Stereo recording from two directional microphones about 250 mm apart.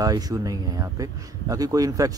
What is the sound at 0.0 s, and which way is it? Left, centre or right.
Speech, centre.